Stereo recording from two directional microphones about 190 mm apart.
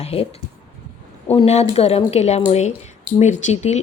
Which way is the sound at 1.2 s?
35° left (ahead or behind).